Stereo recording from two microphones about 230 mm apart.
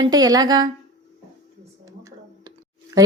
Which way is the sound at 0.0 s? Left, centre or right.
Centre.